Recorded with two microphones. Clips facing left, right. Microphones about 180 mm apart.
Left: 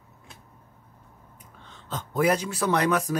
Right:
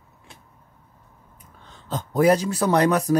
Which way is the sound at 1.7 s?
35° right (ahead or behind).